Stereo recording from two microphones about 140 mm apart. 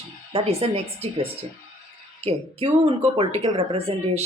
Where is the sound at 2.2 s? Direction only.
45° right (ahead or behind).